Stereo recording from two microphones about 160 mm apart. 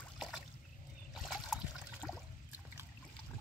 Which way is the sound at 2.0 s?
5° left (ahead or behind).